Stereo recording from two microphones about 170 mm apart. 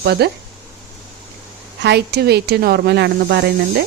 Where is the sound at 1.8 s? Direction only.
75° right (ahead or behind).